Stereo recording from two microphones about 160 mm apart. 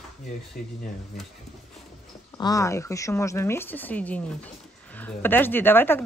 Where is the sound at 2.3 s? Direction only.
25° left (ahead or behind).